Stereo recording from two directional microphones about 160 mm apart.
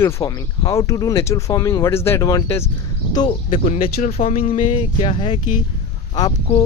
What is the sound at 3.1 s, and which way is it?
Speech, 30° left (ahead or behind).